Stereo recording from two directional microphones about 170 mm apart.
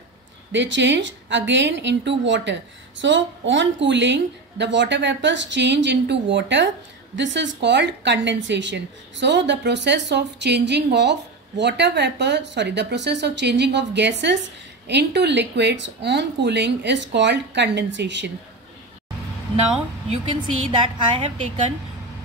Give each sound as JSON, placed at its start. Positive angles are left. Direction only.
{"t": 0.5, "sound": "a woman's voice", "side_deg": -90}
{"t": 20.1, "sound": "a woman's voice", "side_deg": -40}